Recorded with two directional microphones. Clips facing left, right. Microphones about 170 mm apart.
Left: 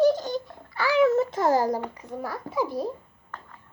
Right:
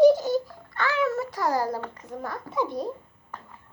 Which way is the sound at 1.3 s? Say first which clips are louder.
Left 4 dB; 25° left (ahead or behind).